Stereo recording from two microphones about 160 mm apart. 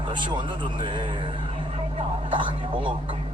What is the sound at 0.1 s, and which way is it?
Speech, 30° right (ahead or behind).